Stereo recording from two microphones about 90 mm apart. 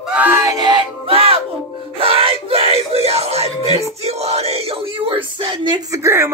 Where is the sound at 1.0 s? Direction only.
90° right.